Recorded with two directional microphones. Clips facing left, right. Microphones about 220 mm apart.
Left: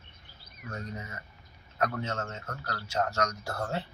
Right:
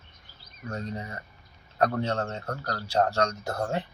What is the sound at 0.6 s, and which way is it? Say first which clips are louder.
Speech: right 5 dB; 35° right (ahead or behind).